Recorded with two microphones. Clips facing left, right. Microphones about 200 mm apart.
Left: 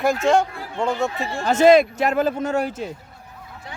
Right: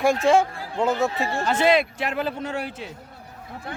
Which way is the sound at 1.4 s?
45° left (ahead or behind).